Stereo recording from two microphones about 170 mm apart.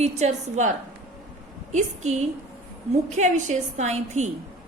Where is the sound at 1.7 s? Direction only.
40° right (ahead or behind).